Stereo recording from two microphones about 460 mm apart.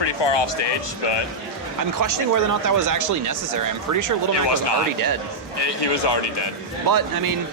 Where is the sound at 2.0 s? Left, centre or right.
Right.